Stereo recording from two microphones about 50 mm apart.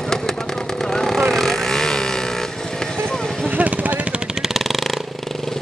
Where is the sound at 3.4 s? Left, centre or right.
Right.